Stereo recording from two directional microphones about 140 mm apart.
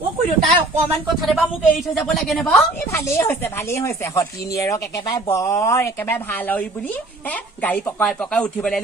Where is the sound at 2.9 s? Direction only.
20° left (ahead or behind).